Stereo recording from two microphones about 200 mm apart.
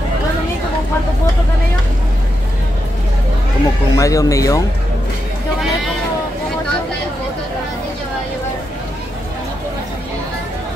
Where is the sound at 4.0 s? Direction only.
15° left (ahead or behind).